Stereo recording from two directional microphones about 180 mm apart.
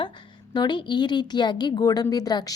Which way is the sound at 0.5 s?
25° left (ahead or behind).